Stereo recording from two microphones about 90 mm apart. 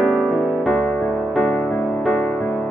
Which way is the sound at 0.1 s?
5° left (ahead or behind).